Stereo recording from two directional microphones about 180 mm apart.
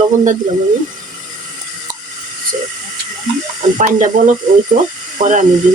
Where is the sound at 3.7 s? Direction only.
45° right (ahead or behind).